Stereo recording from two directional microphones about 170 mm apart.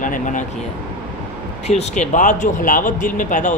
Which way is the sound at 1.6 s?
40° left (ahead or behind).